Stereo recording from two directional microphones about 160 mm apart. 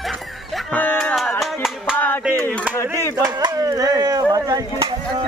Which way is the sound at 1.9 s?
10° left (ahead or behind).